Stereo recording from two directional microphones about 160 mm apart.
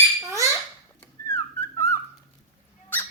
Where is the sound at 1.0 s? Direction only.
15° left (ahead or behind).